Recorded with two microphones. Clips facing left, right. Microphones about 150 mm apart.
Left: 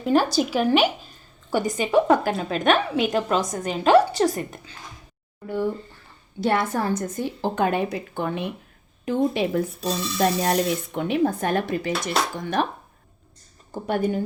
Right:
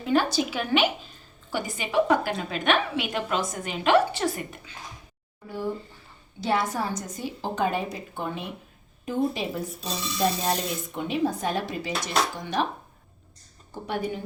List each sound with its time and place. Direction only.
0.0 s a woman's voice: 40° left (ahead or behind)
6.4 s a woman's voice: 55° left (ahead or behind)
13.8 s speech: 50° left (ahead or behind)